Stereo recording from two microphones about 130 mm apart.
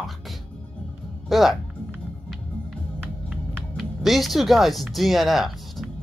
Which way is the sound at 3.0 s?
15° right (ahead or behind).